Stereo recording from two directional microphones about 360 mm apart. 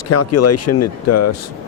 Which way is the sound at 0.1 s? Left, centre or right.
Left.